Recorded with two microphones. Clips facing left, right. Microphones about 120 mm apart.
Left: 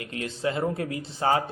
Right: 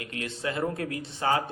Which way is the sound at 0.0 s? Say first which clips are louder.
Left 4 dB; 25° left (ahead or behind).